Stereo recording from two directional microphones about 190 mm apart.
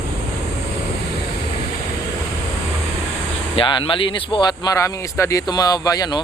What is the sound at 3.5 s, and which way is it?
Speech, 25° left (ahead or behind).